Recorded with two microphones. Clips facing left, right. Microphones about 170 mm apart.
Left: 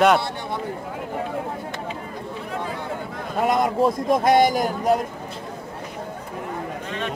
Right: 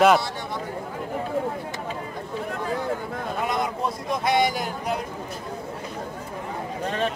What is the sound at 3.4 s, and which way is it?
Speech, 50° left (ahead or behind).